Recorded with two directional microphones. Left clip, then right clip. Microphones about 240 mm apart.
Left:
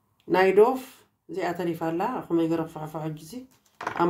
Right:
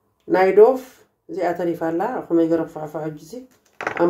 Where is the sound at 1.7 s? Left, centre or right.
Left.